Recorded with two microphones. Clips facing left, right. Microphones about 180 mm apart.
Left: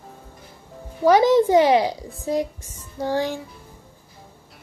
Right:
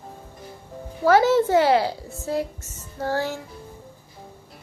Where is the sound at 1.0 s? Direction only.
15° left (ahead or behind).